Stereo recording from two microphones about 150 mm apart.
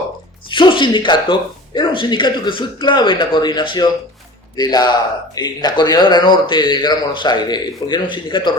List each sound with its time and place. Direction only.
0.5 s speech: 30° left (ahead or behind)